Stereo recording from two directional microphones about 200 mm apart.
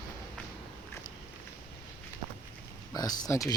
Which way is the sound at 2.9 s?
20° left (ahead or behind).